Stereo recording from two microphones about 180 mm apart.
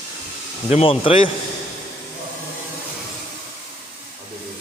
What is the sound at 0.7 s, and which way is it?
Speech, 30° left (ahead or behind).